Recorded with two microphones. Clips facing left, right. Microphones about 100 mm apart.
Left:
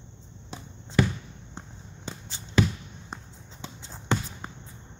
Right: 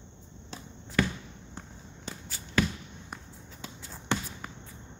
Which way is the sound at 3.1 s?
25° left (ahead or behind).